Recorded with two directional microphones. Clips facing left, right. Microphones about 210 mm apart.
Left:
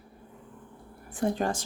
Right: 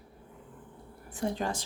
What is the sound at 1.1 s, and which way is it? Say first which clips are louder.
Speech: left 4 dB; 50° left (ahead or behind).